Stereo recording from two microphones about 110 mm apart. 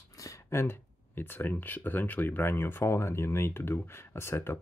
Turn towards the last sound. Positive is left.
turn(degrees=20)  # may be behind; listen again after turning